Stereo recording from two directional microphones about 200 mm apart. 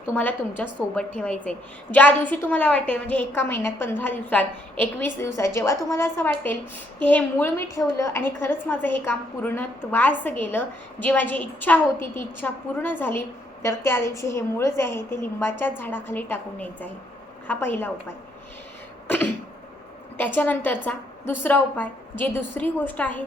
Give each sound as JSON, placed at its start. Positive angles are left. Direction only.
{"t": 0.1, "sound": "a woman's voice", "side_deg": 10}
{"t": 19.0, "sound": "cough", "side_deg": 10}
{"t": 20.1, "sound": "a woman's voice", "side_deg": 10}